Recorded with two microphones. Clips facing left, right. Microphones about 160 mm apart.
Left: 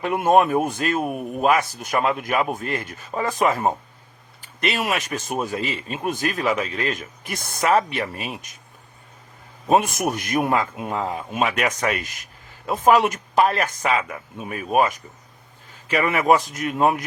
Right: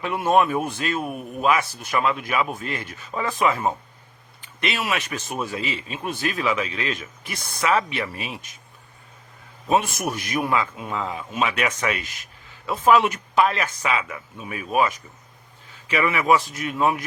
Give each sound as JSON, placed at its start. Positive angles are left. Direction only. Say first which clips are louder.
{"t": 0.0, "sound": "speech", "louder": "left 2 dB", "side_deg": 50}
{"t": 9.6, "sound": "speech", "louder": "left 3 dB", "side_deg": 45}